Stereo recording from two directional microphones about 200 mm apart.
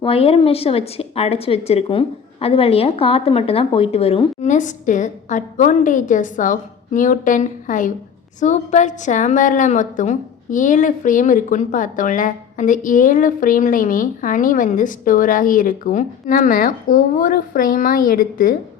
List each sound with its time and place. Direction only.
0.0 s a woman's voice: 30° left (ahead or behind); by 18.5 s 45° left (ahead or behind)